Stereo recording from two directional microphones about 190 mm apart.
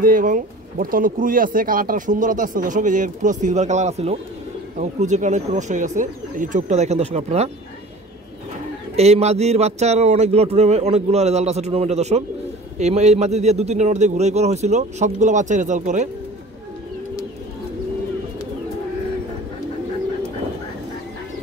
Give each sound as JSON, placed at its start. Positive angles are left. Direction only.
{"t": 0.0, "sound": "speech", "side_deg": -45}
{"t": 8.9, "sound": "speech", "side_deg": -35}